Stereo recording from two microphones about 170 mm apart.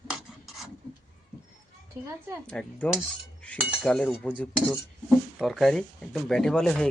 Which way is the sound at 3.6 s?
5° right (ahead or behind).